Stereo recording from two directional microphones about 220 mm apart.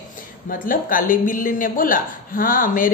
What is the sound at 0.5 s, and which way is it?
A woman's voice, 40° left (ahead or behind).